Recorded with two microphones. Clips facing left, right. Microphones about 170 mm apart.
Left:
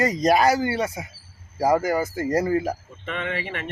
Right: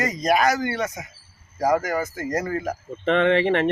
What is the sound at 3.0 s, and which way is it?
Speech, 55° right (ahead or behind).